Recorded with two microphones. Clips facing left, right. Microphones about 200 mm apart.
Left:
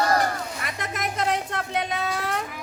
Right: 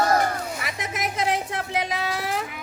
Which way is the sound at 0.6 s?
Centre (ahead or behind).